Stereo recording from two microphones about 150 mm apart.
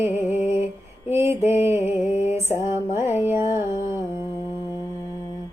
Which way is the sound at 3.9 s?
15° right (ahead or behind).